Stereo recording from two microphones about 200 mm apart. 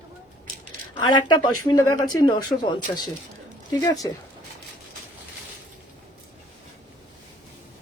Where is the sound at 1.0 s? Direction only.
20° left (ahead or behind).